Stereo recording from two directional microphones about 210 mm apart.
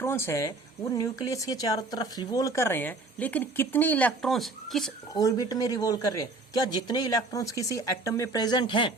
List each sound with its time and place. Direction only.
0.0 s speech: 10° left (ahead or behind)
5.1 s speech: 20° left (ahead or behind)